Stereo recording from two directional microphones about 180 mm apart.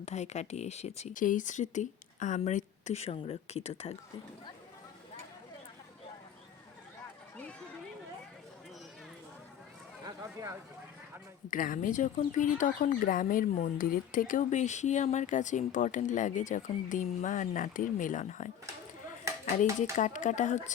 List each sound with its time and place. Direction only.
0.0 s speech: 40° left (ahead or behind)
10.1 s a sound: 15° right (ahead or behind)
11.5 s speech: 50° left (ahead or behind)
19.8 s speech: 45° left (ahead or behind)